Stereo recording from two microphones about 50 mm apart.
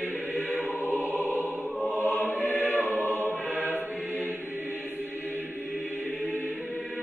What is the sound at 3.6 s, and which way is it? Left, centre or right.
Music, left.